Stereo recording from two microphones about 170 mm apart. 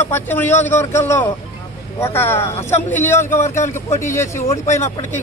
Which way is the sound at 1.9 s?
15° left (ahead or behind).